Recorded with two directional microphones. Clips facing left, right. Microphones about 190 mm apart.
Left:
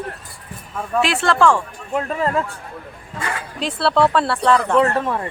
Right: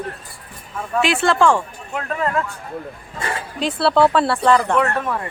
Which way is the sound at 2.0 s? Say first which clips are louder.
Left 2 dB; 25° left (ahead or behind).